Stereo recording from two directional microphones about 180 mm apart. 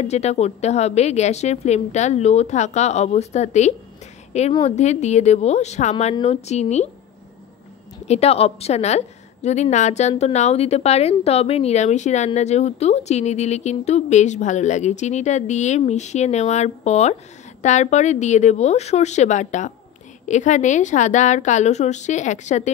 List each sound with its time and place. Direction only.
0.0 s speech: 40° left (ahead or behind)
8.1 s speech: 35° left (ahead or behind)